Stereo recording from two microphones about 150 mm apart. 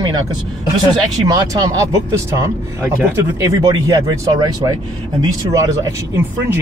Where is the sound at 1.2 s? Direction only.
25° right (ahead or behind).